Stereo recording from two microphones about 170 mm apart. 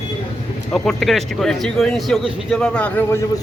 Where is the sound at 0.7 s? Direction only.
Centre (ahead or behind).